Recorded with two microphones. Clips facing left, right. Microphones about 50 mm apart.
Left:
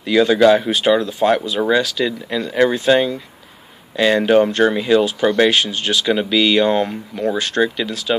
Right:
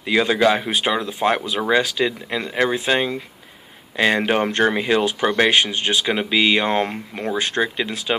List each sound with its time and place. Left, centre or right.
0.0 s speech: right
0.4 s speech: centre
2.6 s speech: centre; by 5.1 s right
5.2 s speech: right